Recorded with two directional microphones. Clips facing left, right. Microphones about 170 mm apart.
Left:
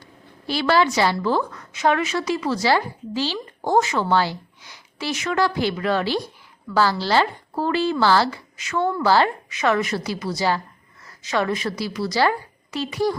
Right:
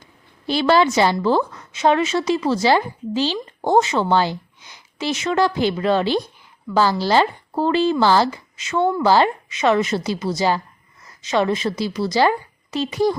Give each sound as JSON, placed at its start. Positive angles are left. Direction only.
{"t": 0.4, "sound": "a woman's voice", "side_deg": -20}